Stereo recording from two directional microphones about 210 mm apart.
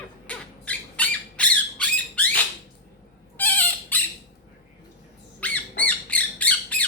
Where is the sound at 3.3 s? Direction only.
10° left (ahead or behind).